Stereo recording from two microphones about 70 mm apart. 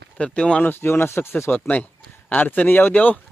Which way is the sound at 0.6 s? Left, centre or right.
Left.